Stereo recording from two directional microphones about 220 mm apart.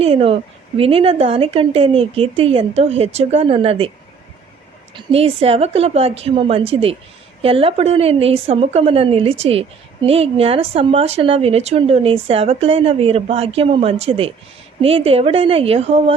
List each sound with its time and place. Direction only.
0.0 s a woman's voice: 25° right (ahead or behind)
4.9 s a woman's voice: 25° right (ahead or behind)